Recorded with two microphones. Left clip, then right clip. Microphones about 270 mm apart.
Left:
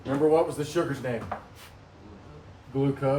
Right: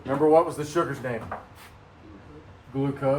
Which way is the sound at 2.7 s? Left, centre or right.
Centre.